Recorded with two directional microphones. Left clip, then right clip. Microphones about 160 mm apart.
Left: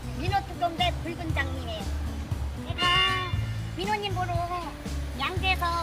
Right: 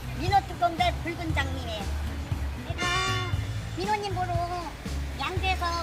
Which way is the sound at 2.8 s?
Centre (ahead or behind).